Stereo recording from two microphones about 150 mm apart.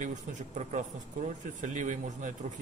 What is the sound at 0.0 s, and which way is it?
A man's voice, 55° right (ahead or behind).